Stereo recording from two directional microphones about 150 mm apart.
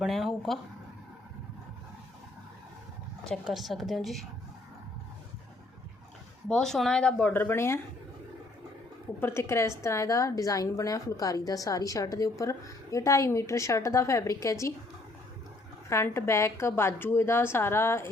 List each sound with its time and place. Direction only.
0.0 s a woman's voice: centre (ahead or behind)
3.2 s a woman's voice: centre (ahead or behind)
6.5 s a woman's voice: 5° left (ahead or behind)
9.2 s a woman's voice: 15° left (ahead or behind)
15.9 s a woman's voice: 15° left (ahead or behind)